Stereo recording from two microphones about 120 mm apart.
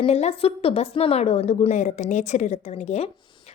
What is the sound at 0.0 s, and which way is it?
A woman's voice, 60° left (ahead or behind).